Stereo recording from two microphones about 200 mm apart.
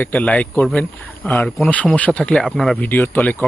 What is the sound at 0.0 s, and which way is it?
Speech, 5° left (ahead or behind).